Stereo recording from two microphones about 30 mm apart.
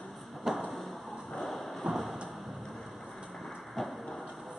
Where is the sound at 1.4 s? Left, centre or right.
Centre.